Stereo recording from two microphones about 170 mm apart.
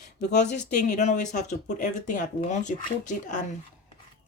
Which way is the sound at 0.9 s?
45° left (ahead or behind).